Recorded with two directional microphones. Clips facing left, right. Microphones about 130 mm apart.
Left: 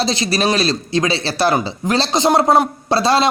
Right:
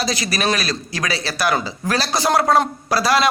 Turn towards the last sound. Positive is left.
turn(degrees=25)  # may be behind; listen again after turning